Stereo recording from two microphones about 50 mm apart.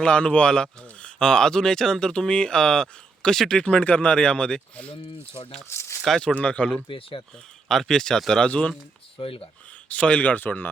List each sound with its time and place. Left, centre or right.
0.0 s speech: left
5.7 s speech: left
6.2 s speech: left
7.7 s speech: centre
9.9 s speech: left